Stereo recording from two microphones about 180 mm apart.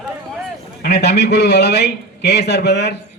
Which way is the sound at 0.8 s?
65° left (ahead or behind).